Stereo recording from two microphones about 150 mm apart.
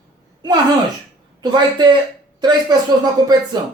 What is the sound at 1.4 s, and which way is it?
Speech, 30° right (ahead or behind).